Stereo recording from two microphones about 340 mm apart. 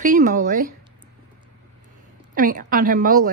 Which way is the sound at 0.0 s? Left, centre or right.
Right.